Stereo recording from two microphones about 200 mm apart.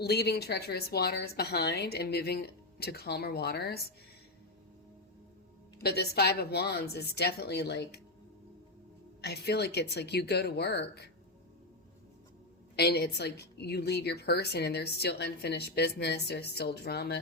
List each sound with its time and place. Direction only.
0.0 s a woman's voice: 55° left (ahead or behind)
5.8 s a woman's voice: 50° left (ahead or behind)
9.2 s speech: 55° left (ahead or behind)
12.7 s a woman's voice: 55° left (ahead or behind)